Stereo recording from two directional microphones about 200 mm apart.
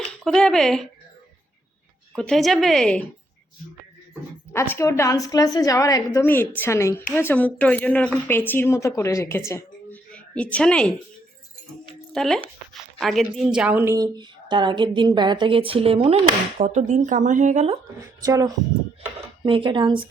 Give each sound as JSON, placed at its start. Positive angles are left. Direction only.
{"t": 0.3, "sound": "speech", "side_deg": 5}
{"t": 2.1, "sound": "speech", "side_deg": 0}
{"t": 4.7, "sound": "speech", "side_deg": 15}
{"t": 12.1, "sound": "a woman's voice", "side_deg": 0}
{"t": 18.2, "sound": "a woman's voice", "side_deg": -15}